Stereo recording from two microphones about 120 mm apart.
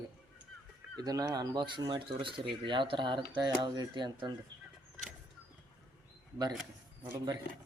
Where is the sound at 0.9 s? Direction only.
35° right (ahead or behind).